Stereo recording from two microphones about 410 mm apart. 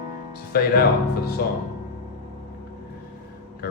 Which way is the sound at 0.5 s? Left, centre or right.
Left.